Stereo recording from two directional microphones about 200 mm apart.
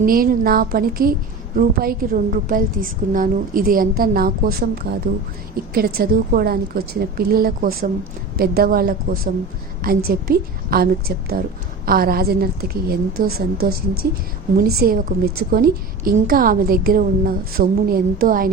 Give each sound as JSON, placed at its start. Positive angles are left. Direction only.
{"t": 0.0, "sound": "a woman's voice", "side_deg": -45}